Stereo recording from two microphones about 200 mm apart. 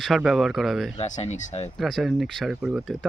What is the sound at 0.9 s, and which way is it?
Speech, 35° left (ahead or behind).